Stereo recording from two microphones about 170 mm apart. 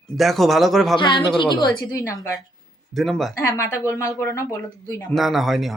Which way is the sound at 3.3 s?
15° left (ahead or behind).